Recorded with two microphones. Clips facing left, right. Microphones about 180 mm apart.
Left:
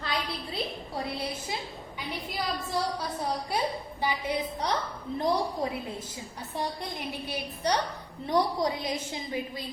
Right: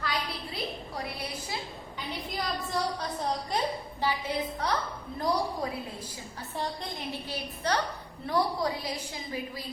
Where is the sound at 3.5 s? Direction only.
10° left (ahead or behind).